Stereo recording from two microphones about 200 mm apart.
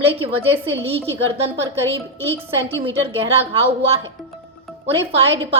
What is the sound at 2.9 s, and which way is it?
Speech, 30° right (ahead or behind).